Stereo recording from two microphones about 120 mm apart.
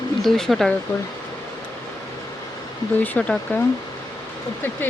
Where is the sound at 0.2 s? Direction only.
5° left (ahead or behind).